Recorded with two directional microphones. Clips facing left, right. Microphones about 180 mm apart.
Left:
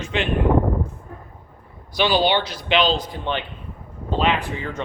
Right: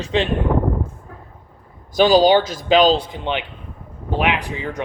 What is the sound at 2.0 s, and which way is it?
A man's voice, 40° right (ahead or behind).